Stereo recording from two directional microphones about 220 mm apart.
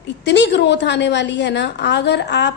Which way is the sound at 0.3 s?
50° left (ahead or behind).